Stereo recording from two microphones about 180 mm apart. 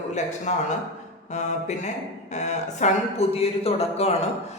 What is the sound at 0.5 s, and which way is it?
Speech, 40° left (ahead or behind).